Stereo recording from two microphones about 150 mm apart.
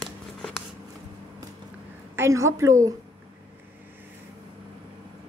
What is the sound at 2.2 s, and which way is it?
Speech, 20° right (ahead or behind).